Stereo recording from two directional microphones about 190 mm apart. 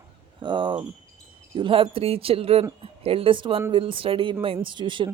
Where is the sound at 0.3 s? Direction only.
25° right (ahead or behind).